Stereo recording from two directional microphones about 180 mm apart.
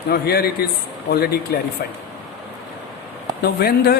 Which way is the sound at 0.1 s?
60° left (ahead or behind).